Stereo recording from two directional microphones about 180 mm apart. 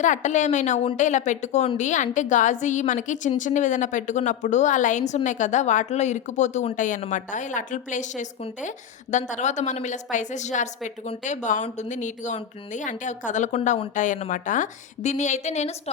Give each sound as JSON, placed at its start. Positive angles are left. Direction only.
{"t": 0.0, "sound": "a woman's voice", "side_deg": 45}